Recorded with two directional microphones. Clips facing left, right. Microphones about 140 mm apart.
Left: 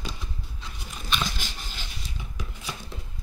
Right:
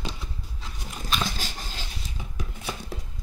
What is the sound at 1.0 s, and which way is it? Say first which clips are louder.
Dog: right 1 dB; 35° right (ahead or behind).